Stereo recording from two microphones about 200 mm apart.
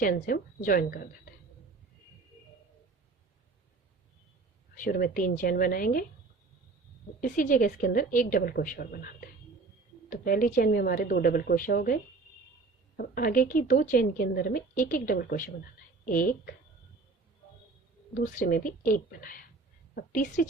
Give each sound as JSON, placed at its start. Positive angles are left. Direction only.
{"t": 0.0, "sound": "a woman's voice", "side_deg": 45}
{"t": 4.7, "sound": "a woman's voice", "side_deg": 45}
{"t": 7.2, "sound": "a woman's voice", "side_deg": 40}
{"t": 13.0, "sound": "a woman's voice", "side_deg": 45}
{"t": 18.1, "sound": "a woman's voice", "side_deg": 45}